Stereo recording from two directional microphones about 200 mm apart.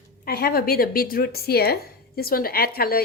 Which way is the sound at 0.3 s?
50° left (ahead or behind).